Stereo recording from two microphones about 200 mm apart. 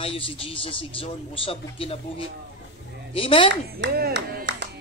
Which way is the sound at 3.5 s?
55° right (ahead or behind).